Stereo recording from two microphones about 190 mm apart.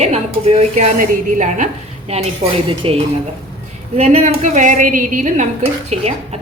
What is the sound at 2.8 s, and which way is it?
Speech, 30° right (ahead or behind).